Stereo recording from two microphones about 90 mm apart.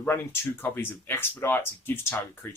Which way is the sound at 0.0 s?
25° left (ahead or behind).